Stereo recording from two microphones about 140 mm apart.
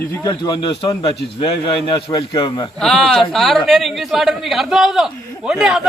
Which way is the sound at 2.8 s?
5° left (ahead or behind).